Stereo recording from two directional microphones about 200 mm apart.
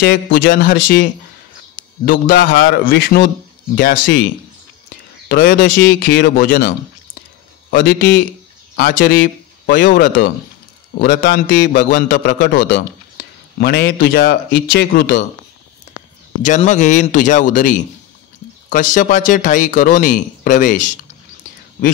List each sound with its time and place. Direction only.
0.0 s a man's voice: 55° left (ahead or behind)
2.4 s a man's voice: 45° left (ahead or behind)
5.3 s a man's voice: 50° left (ahead or behind)
7.7 s a man's voice: 55° left (ahead or behind)
9.7 s speech: 60° left (ahead or behind)
11.0 s a man's voice: 50° left (ahead or behind)
16.4 s speech: 35° left (ahead or behind)